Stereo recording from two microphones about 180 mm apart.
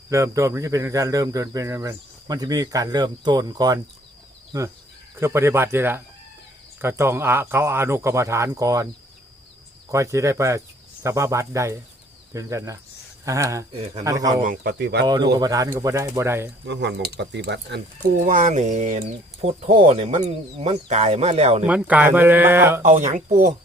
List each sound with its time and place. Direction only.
0.1 s speech: 15° right (ahead or behind)
5.2 s speech: 15° right (ahead or behind)
9.9 s speech: 15° right (ahead or behind)
14.4 s speech: 55° right (ahead or behind)
15.0 s speech: 20° right (ahead or behind)
16.6 s speech: 75° right (ahead or behind)
18.3 s speech: 45° right (ahead or behind)
21.7 s speech: 10° right (ahead or behind)
22.8 s speech: 40° right (ahead or behind)